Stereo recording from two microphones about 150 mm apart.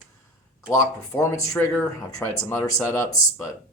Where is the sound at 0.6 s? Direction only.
20° left (ahead or behind).